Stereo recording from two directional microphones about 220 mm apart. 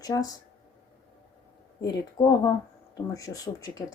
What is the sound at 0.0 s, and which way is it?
Speech, 15° left (ahead or behind).